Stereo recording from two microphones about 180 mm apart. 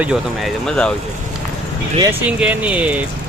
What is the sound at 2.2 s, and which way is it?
Speech, 5° right (ahead or behind).